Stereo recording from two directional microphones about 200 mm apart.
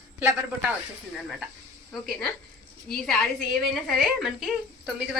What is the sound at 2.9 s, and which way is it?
A woman's voice, 5° left (ahead or behind).